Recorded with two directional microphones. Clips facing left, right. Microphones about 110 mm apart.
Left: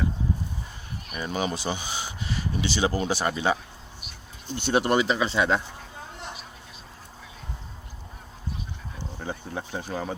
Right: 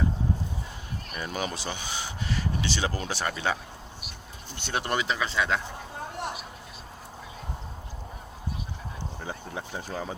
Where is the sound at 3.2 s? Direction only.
15° left (ahead or behind).